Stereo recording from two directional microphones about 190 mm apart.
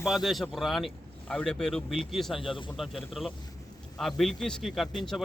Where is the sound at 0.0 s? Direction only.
Centre (ahead or behind).